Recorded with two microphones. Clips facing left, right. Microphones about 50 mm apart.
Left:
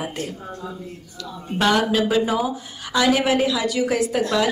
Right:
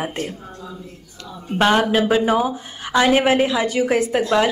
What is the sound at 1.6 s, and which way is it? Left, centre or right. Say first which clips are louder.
A woman's voice: right 2 dB; right.